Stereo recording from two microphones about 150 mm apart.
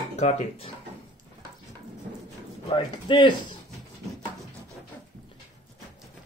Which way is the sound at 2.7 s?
35° left (ahead or behind).